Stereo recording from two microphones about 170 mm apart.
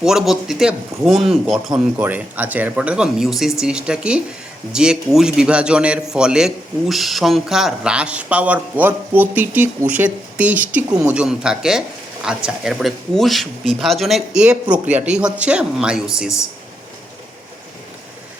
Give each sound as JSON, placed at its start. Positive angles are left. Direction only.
{"t": 0.0, "sound": "a man's voice", "side_deg": -5}